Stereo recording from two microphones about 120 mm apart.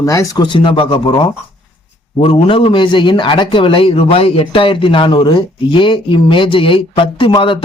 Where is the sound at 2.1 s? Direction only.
55° left (ahead or behind).